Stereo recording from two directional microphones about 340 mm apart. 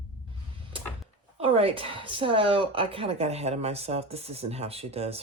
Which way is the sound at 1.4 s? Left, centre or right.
Centre.